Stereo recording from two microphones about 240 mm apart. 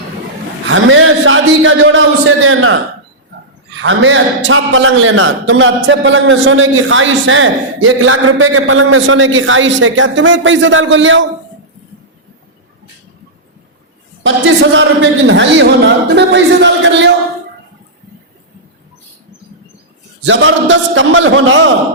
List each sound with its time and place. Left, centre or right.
0.7 s a man's voice: right
3.8 s a man's voice: right
14.3 s a man's voice: right
20.2 s a man's voice: right